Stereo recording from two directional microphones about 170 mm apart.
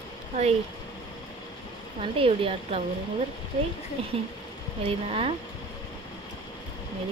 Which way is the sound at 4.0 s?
35° right (ahead or behind).